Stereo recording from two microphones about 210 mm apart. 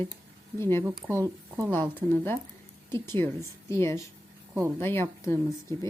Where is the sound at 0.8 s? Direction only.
10° right (ahead or behind).